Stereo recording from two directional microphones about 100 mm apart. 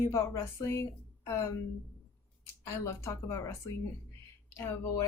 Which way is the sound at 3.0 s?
30° left (ahead or behind).